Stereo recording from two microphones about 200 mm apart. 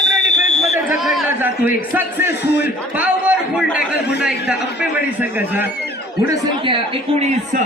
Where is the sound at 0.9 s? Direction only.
5° right (ahead or behind).